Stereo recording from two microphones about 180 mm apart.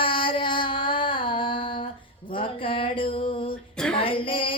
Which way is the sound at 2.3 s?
30° left (ahead or behind).